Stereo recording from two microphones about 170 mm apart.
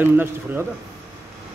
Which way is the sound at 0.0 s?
10° right (ahead or behind).